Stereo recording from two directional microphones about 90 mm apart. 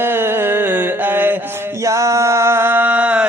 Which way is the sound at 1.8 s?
35° right (ahead or behind).